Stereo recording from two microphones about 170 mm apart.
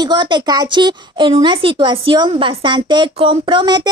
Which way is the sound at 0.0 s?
25° right (ahead or behind).